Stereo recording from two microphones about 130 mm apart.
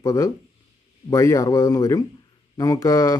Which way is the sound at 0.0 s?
25° left (ahead or behind).